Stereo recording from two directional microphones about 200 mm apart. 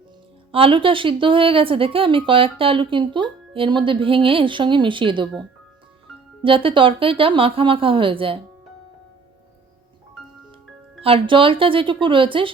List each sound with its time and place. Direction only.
0.5 s speech: 25° right (ahead or behind)
6.4 s speech: 25° right (ahead or behind)
11.0 s speech: 25° right (ahead or behind)